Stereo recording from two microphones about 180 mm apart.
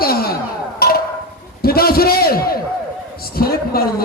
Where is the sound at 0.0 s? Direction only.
55° left (ahead or behind).